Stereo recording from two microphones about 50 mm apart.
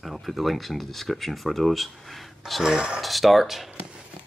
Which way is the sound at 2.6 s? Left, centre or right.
Centre.